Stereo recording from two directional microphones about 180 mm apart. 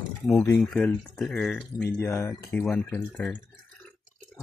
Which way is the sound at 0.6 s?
Centre (ahead or behind).